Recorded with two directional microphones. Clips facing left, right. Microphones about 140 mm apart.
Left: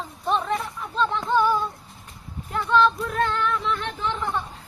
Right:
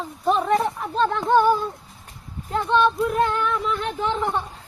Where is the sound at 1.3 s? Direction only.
50° right (ahead or behind).